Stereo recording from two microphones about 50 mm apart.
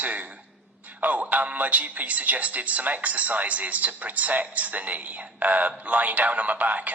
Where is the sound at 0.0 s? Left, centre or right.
Right.